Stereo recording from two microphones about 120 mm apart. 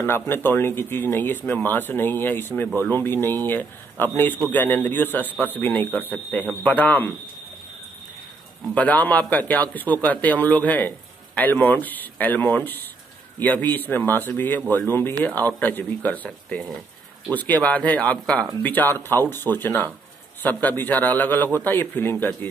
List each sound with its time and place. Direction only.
0.0 s speech: 20° left (ahead or behind)
8.7 s speech: 15° left (ahead or behind)